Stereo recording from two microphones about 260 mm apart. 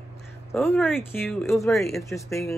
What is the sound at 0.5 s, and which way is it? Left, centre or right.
Speech, centre.